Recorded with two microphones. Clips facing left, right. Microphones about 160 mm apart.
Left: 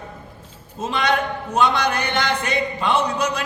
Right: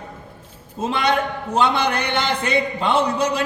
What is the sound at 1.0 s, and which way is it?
A man's voice, 30° right (ahead or behind).